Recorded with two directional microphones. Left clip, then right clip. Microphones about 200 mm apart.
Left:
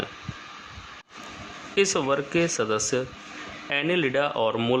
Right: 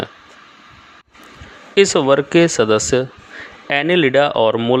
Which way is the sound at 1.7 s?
30° right (ahead or behind).